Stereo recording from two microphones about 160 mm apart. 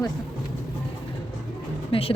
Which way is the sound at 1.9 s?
35° left (ahead or behind).